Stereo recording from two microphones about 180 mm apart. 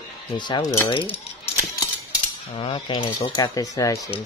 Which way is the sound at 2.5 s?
30° left (ahead or behind).